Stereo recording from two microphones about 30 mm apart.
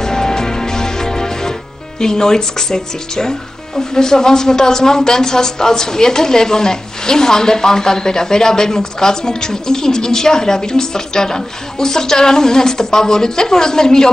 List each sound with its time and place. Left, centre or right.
0.0 s music: centre
2.0 s speech: left